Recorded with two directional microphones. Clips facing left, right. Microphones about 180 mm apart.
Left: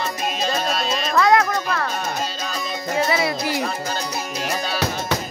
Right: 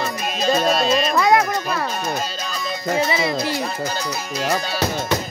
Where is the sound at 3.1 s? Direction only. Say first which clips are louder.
Even; 5° left (ahead or behind).